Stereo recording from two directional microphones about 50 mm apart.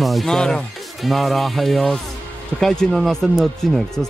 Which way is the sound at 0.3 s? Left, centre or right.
Centre.